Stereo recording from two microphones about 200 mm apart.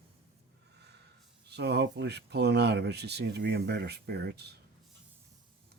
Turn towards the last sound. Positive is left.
turn(degrees=-55)  # may be behind; listen again after turning